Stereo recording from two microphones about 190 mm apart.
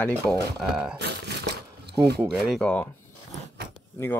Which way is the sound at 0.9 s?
60° right (ahead or behind).